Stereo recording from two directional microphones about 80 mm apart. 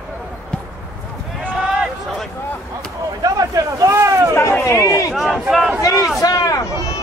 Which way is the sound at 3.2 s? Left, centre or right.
Right.